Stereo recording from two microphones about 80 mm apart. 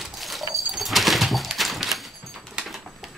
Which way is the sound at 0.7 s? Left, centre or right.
Centre.